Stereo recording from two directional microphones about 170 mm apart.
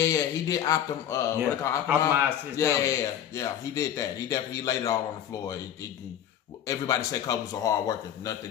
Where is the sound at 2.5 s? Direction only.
20° left (ahead or behind).